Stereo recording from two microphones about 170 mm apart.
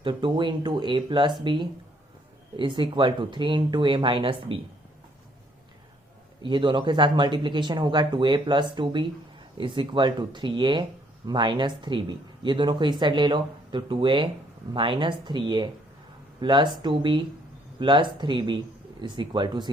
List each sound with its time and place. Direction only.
0.0 s speech: 30° right (ahead or behind)
6.4 s speech: 30° right (ahead or behind)